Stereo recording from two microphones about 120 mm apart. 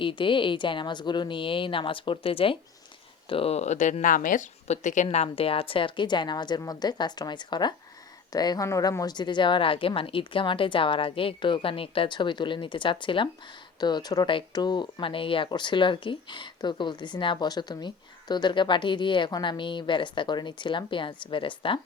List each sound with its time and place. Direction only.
0.0 s speech: 45° left (ahead or behind); by 5.0 s 90° left
5.1 s speech: 55° left (ahead or behind)